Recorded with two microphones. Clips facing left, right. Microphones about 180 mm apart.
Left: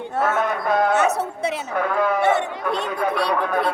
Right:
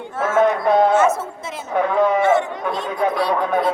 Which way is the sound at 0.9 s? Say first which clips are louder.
Right 3 dB; 70° left (ahead or behind).